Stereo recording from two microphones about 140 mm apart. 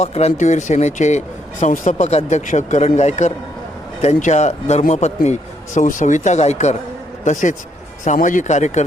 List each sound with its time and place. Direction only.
0.0 s speech: 50° left (ahead or behind)